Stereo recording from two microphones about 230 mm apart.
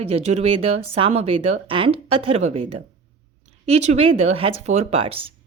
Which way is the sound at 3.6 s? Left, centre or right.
Right.